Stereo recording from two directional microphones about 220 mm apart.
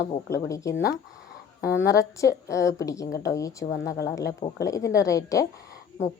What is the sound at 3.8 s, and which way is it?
Speech, 50° left (ahead or behind).